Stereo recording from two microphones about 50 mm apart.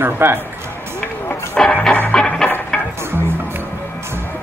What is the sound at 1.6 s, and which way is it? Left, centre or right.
Music, centre.